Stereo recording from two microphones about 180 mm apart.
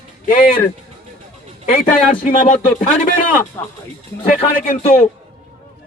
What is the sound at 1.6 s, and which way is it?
A man's voice, 40° left (ahead or behind).